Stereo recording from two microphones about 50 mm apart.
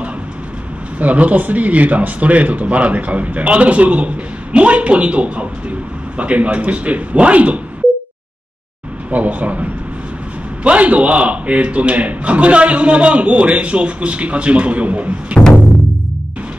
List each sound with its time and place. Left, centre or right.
0.9 s speech: right
9.1 s speech: right